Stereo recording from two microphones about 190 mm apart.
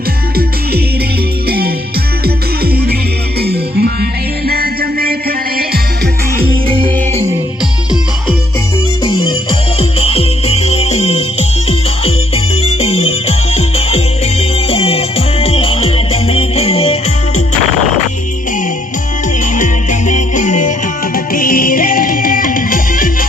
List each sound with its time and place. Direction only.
1.5 s music: 55° right (ahead or behind)
3.4 s music: 60° right (ahead or behind)
6.7 s music: 30° right (ahead or behind)
9.0 s music: 25° left (ahead or behind)
19.5 s music: 40° left (ahead or behind)